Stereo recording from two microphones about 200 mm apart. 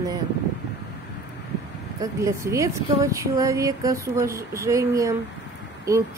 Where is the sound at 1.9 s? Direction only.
15° right (ahead or behind).